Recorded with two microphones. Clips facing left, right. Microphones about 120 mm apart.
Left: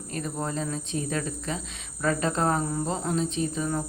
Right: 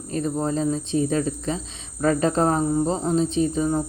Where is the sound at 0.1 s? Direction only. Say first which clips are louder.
Right 7 dB; 30° right (ahead or behind).